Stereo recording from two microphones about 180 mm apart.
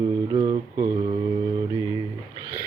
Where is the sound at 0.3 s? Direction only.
25° right (ahead or behind).